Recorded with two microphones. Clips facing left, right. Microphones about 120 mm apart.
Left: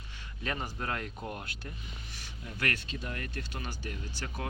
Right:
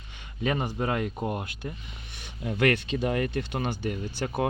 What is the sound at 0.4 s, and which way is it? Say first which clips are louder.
Speech: right 9 dB; 60° right (ahead or behind).